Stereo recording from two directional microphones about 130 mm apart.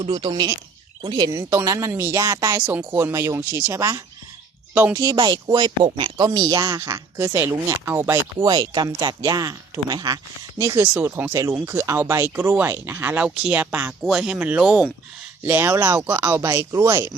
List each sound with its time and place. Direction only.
0.0 s speech: 40° right (ahead or behind); by 4.0 s 20° right (ahead or behind)
4.7 s speech: 10° right (ahead or behind)
4.9 s speech: 25° right (ahead or behind)
10.6 s speech: 20° right (ahead or behind)
15.4 s speech: 15° right (ahead or behind)